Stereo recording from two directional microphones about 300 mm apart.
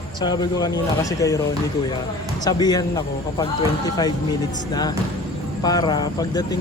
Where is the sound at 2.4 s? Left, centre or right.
Centre.